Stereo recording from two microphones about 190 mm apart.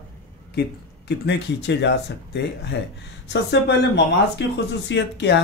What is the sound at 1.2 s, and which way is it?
Speech, 65° left (ahead or behind).